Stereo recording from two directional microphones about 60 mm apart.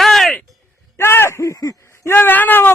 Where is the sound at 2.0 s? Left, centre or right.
Left.